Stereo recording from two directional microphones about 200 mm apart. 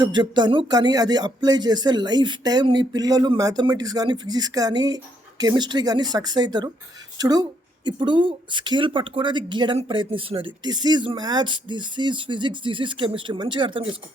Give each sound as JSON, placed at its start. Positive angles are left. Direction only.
{"t": 0.0, "sound": "speech", "side_deg": -20}